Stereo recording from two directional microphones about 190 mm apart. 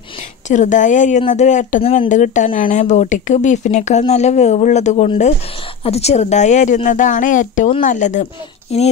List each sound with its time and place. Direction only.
0.5 s speech: 40° left (ahead or behind)